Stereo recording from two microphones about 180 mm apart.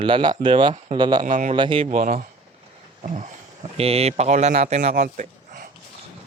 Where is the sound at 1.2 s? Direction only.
40° right (ahead or behind).